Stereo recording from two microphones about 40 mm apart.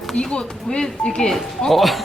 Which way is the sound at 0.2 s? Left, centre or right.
Left.